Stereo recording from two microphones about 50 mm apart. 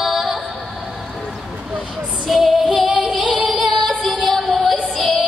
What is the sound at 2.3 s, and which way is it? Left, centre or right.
Female singing, centre.